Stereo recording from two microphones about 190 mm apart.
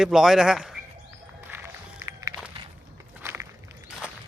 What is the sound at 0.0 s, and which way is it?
Speech, centre (ahead or behind).